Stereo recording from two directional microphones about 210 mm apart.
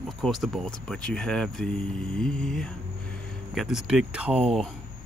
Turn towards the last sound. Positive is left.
turn(degrees=-5)  # may be behind; listen again after turning